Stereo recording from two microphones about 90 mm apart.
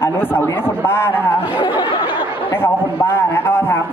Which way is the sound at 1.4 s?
65° left (ahead or behind).